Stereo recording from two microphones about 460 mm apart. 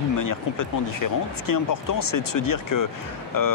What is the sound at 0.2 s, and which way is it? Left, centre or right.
Speech, left.